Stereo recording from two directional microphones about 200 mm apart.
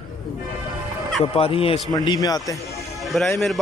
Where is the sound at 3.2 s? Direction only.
Centre (ahead or behind).